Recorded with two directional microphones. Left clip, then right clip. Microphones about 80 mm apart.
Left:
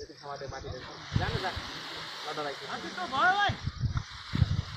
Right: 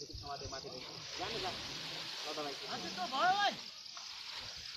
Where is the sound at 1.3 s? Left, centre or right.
Left; by 4.0 s centre.